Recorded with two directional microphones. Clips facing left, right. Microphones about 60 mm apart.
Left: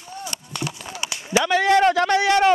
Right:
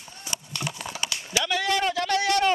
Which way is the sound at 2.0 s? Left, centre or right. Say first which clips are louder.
Left 6 dB; left.